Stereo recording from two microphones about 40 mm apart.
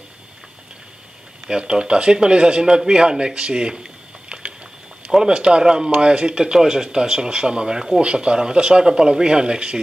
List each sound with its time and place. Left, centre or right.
1.5 s speech: right
4.3 s a sound: right
5.1 s speech: right
8.0 s speech: right